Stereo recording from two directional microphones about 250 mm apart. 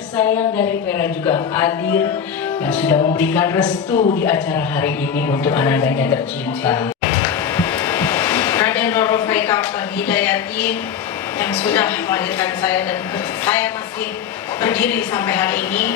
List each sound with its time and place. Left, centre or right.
0.2 s a woman's voice: centre
3.9 s a woman's voice: left
4.3 s a woman's voice: centre
6.6 s hair dryer: centre
11.3 s a woman's voice: centre
14.6 s a woman's voice: centre